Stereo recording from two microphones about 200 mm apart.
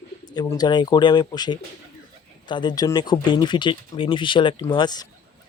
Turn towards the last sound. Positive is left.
turn(degrees=20)  # may be behind; listen again after turning